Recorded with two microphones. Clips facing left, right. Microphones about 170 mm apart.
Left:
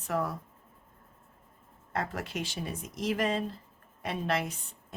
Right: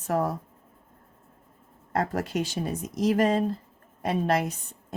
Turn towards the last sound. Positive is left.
turn(degrees=-40)  # may be behind; listen again after turning